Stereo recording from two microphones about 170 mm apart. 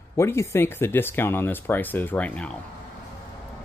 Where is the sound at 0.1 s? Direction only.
15° left (ahead or behind).